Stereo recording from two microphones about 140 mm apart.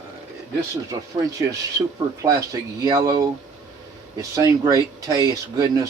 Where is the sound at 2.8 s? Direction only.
30° right (ahead or behind).